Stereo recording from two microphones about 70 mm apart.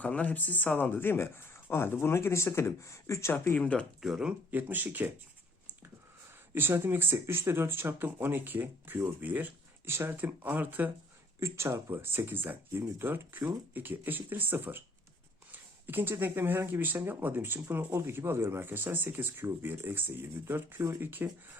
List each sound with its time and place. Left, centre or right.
0.0 s speech: left
3.6 s speech: centre
4.0 s speech: centre
4.5 s speech: right
6.5 s speech: right
11.3 s speech: right
11.9 s speech: right